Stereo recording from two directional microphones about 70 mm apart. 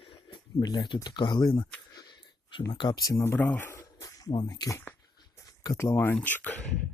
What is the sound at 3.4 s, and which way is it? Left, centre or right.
Speech, left.